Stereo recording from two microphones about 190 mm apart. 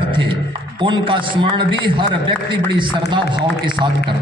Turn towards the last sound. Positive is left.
turn(degrees=-25)  # may be behind; listen again after turning